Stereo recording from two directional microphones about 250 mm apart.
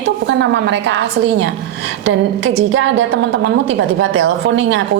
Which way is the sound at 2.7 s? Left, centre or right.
Right.